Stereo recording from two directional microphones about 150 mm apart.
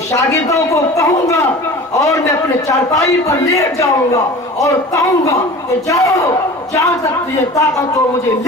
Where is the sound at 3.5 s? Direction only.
20° left (ahead or behind).